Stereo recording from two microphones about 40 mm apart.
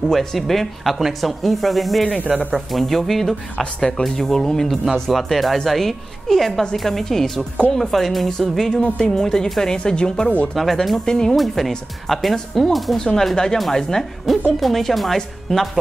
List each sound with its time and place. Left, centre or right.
0.1 s speech: centre
2.8 s speech: centre
3.5 s speech: centre
4.0 s speech: centre
5.1 s speech: centre
10.5 s speech: centre
11.1 s speech: centre
11.3 s speech: centre
14.3 s speech: centre